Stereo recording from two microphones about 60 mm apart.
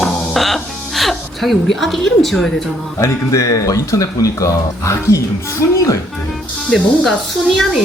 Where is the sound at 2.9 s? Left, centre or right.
Left.